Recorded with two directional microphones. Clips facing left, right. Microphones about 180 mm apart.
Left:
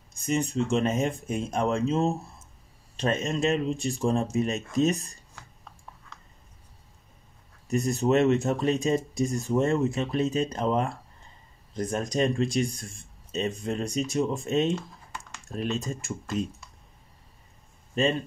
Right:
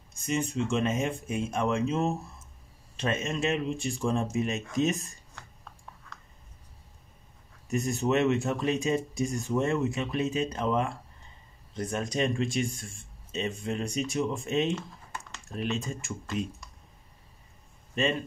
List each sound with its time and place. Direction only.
0.1 s speech: 35° left (ahead or behind)
7.7 s speech: 35° left (ahead or behind)
18.0 s speech: 35° left (ahead or behind)